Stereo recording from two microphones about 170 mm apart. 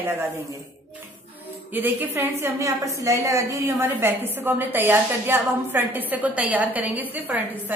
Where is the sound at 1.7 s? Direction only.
10° right (ahead or behind).